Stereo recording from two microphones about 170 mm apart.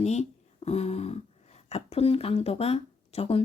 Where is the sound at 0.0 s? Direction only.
40° left (ahead or behind).